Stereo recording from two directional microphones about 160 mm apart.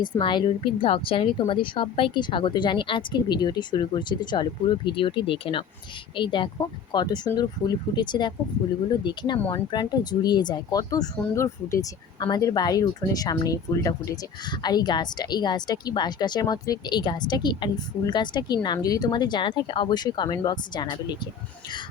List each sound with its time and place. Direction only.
0.0 s a woman's voice: 30° left (ahead or behind)